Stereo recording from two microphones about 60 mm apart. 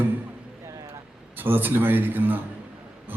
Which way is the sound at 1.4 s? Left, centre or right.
Right.